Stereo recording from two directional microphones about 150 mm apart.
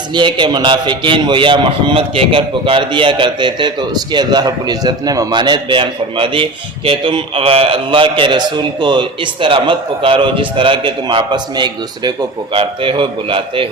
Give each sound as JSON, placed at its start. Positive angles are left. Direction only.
{"t": 0.1, "sound": "a man's voice", "side_deg": -30}